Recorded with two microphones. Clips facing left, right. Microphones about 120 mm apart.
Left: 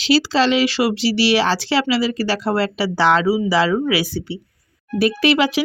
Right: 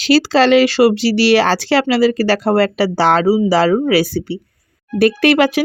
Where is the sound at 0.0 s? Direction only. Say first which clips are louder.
Right 4 dB; 50° right (ahead or behind).